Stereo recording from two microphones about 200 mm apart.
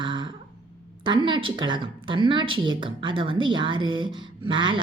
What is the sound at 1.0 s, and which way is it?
A woman's voice, 25° right (ahead or behind).